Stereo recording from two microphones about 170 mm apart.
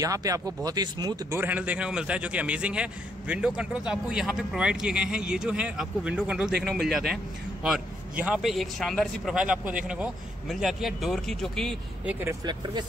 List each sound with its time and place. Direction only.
0.0 s speech: 20° right (ahead or behind)
1.4 s a man's voice: 10° right (ahead or behind)